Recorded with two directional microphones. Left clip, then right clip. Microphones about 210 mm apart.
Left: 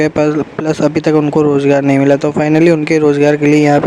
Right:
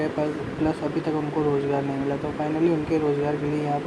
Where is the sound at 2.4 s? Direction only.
45° left (ahead or behind).